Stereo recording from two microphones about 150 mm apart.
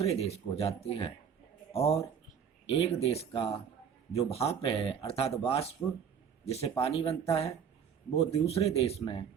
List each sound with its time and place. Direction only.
0.0 s speech: 40° left (ahead or behind)
2.6 s speech: 40° left (ahead or behind)